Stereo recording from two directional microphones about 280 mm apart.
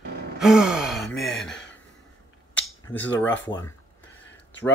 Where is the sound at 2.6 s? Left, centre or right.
Centre.